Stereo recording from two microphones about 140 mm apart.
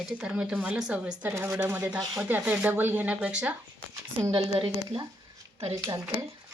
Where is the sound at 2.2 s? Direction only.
10° right (ahead or behind).